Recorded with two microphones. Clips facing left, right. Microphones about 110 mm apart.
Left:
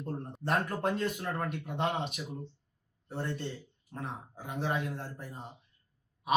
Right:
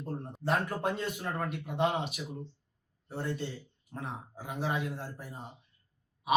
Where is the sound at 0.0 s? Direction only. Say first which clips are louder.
Right 1 dB; 5° right (ahead or behind).